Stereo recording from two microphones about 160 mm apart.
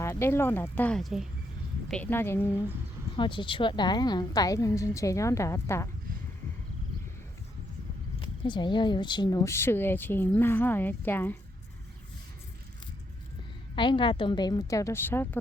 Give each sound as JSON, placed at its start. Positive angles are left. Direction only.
{"t": 0.0, "sound": "speech", "side_deg": 15}
{"t": 1.9, "sound": "speech", "side_deg": 10}
{"t": 3.2, "sound": "a woman's voice", "side_deg": 30}
{"t": 8.4, "sound": "speech", "side_deg": 30}
{"t": 13.7, "sound": "a woman's voice", "side_deg": 30}